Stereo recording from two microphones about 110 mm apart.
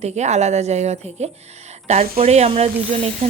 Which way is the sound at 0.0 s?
90° right.